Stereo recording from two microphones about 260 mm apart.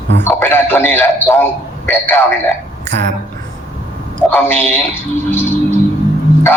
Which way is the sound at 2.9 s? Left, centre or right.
Right.